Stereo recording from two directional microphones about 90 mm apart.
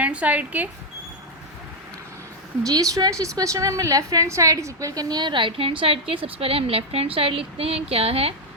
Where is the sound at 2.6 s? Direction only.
40° right (ahead or behind); by 8.3 s 90° right.